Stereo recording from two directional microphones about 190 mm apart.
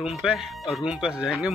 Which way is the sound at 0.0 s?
5° right (ahead or behind).